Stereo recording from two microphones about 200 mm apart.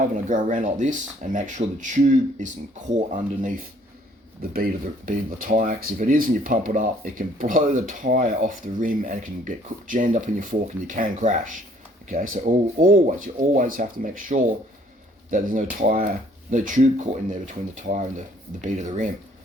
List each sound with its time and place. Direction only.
0.3 s speech: 40° right (ahead or behind)